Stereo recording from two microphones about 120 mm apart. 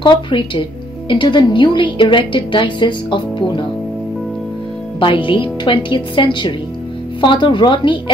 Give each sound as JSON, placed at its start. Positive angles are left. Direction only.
{"t": 0.0, "sound": "speech", "side_deg": 40}
{"t": 5.0, "sound": "speech", "side_deg": 45}